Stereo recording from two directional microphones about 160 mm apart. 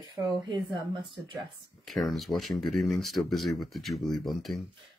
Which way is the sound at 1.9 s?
Centre (ahead or behind).